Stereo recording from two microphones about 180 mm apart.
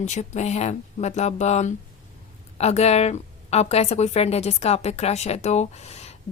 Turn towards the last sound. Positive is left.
turn(degrees=35)  # may be behind; listen again after turning